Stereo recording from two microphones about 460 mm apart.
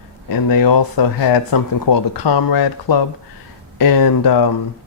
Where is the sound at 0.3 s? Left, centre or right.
Left.